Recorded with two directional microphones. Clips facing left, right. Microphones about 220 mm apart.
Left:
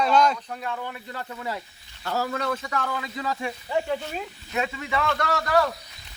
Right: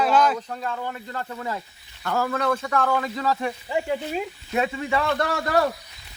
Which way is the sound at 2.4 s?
50° right (ahead or behind).